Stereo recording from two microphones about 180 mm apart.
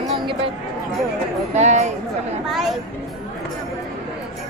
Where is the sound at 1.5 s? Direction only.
40° right (ahead or behind).